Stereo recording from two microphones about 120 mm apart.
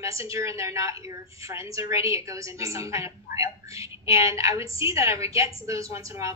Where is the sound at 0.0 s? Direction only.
25° right (ahead or behind).